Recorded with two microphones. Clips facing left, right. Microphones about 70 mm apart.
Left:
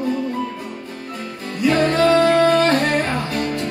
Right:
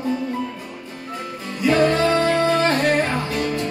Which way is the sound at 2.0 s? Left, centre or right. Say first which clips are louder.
Left 4 dB; left.